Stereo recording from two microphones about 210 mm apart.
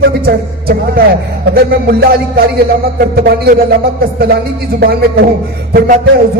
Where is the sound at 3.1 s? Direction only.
45° right (ahead or behind).